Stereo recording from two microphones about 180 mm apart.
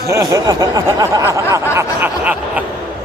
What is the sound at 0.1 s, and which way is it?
Speech, 15° right (ahead or behind).